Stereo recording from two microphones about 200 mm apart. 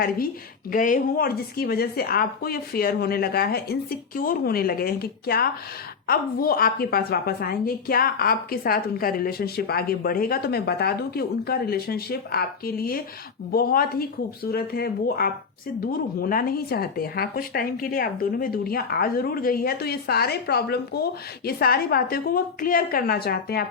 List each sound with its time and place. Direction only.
0.7 s speech: 40° left (ahead or behind)